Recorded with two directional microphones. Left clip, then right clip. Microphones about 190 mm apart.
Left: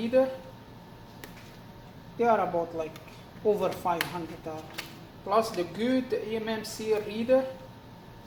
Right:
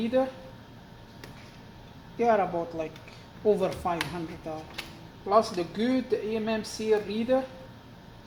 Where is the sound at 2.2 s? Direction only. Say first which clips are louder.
Even; 35° right (ahead or behind).